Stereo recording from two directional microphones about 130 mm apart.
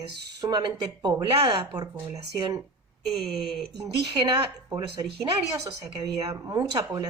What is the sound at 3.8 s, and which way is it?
Speech, 30° right (ahead or behind).